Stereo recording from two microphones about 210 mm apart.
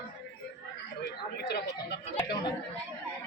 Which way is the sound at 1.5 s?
50° left (ahead or behind).